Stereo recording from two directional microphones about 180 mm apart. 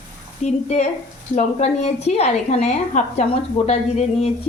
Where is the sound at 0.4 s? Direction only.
35° left (ahead or behind).